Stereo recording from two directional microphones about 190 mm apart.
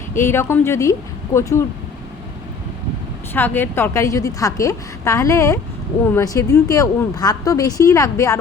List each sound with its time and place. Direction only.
0.2 s a woman's voice: 15° left (ahead or behind)
3.3 s a woman's voice: 10° left (ahead or behind)